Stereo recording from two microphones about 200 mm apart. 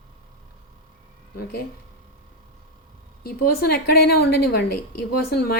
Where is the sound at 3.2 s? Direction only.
50° left (ahead or behind).